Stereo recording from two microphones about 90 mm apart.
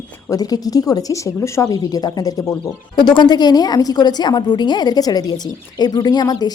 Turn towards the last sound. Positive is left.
turn(degrees=45)  # may be behind; listen again after turning